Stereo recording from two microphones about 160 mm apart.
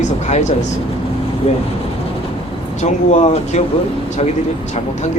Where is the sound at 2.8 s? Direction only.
45° left (ahead or behind).